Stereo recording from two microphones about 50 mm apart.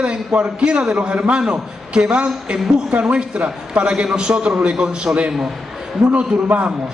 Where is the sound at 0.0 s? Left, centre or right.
Centre.